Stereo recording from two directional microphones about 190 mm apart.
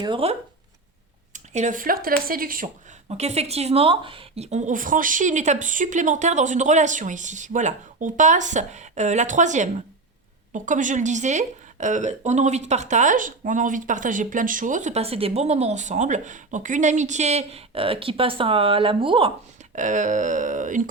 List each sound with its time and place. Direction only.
0.0 s speech: 30° right (ahead or behind)
1.3 s speech: 40° right (ahead or behind)
3.1 s a woman's voice: 35° right (ahead or behind)
19.7 s a woman's voice: 40° right (ahead or behind)